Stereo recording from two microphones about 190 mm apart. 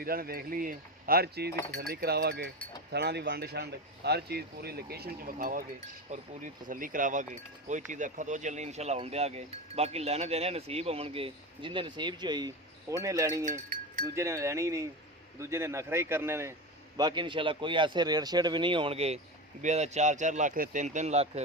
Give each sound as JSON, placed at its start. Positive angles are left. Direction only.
{"t": 0.0, "sound": "speech", "side_deg": -50}
{"t": 7.9, "sound": "cowbell", "side_deg": -40}
{"t": 14.2, "sound": "a man's voice", "side_deg": -15}
{"t": 19.6, "sound": "cowbell", "side_deg": -35}